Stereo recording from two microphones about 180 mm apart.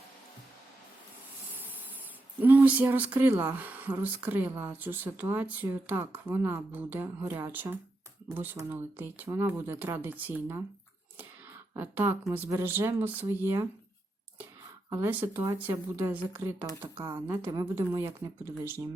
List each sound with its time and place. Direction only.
2.4 s speech: 10° right (ahead or behind)
11.7 s speech: 10° right (ahead or behind)
14.8 s speech: 15° right (ahead or behind)